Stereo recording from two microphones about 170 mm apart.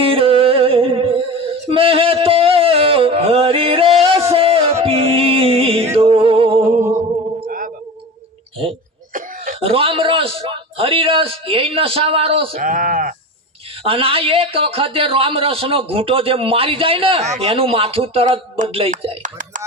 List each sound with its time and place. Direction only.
0.0 s music: 30° right (ahead or behind)
7.4 s a sound: 55° right (ahead or behind)
9.1 s cough: 55° right (ahead or behind)
9.6 s a sound: 35° right (ahead or behind)
12.5 s speech: 55° right (ahead or behind)
13.8 s a man's voice: 35° right (ahead or behind)
19.2 s music: 50° right (ahead or behind)